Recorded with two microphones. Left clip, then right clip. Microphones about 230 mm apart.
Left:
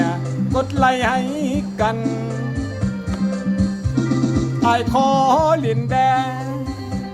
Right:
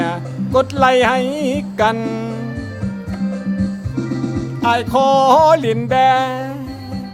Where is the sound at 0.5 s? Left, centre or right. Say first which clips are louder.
Right 5 dB; right.